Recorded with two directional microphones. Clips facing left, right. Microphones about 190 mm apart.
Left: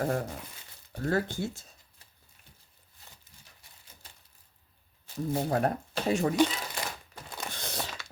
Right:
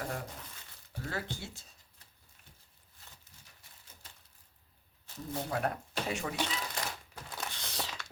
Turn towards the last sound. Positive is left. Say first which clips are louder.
# left 4 dB
turn(degrees=50)  # may be behind; listen again after turning